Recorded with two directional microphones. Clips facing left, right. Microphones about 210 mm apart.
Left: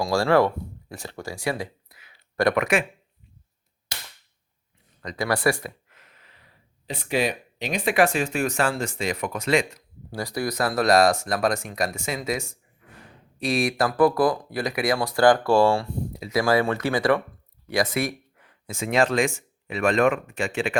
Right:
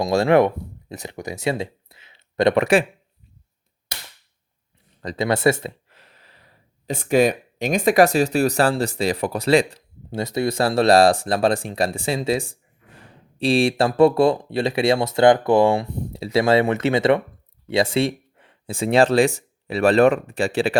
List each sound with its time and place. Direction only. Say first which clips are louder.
0.0 s speech: right 4 dB; 20° right (ahead or behind)
5.0 s speech: right 4 dB; 25° right (ahead or behind)